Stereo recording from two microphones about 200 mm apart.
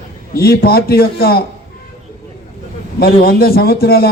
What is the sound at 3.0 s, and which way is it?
A man's voice, 50° left (ahead or behind).